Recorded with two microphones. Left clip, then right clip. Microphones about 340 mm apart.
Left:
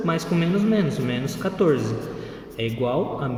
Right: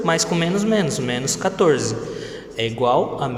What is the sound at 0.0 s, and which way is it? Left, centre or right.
A man's voice, centre.